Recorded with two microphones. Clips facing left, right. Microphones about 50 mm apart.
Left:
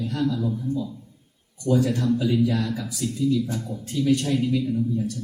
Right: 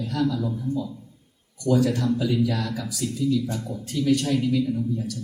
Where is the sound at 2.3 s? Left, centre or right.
Centre.